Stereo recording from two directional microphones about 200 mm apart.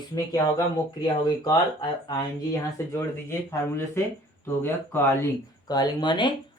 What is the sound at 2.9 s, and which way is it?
Speech, 15° left (ahead or behind).